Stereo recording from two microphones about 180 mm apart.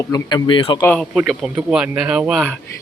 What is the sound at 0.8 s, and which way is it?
Speech, 5° left (ahead or behind).